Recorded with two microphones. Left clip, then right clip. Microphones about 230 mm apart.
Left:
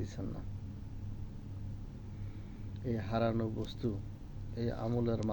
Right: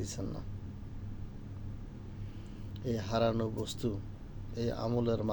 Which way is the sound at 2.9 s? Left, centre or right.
Centre.